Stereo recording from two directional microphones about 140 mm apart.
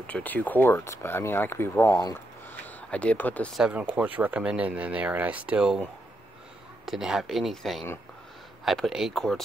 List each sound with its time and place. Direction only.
0.0 s speech: 10° left (ahead or behind)
3.5 s speech: 5° right (ahead or behind)
6.9 s speech: 5° right (ahead or behind)